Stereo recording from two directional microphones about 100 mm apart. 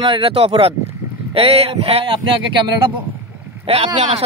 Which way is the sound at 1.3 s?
90° right.